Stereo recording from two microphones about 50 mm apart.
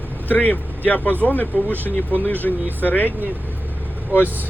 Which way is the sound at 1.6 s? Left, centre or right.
Right.